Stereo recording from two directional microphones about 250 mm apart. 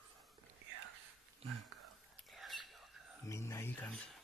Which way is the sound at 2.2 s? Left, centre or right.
Centre.